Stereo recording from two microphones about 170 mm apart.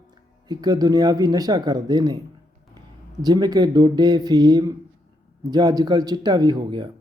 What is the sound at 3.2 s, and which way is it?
Speech, 25° right (ahead or behind).